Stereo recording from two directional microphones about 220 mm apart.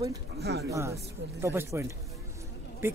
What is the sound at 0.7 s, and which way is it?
Speech, 15° right (ahead or behind).